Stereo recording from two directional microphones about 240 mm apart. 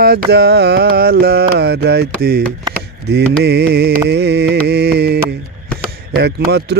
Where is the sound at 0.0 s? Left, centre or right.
Right.